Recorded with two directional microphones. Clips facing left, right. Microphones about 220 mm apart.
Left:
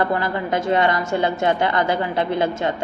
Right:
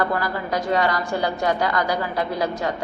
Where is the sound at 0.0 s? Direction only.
25° left (ahead or behind).